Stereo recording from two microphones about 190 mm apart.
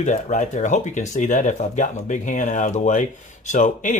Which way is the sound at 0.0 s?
40° left (ahead or behind).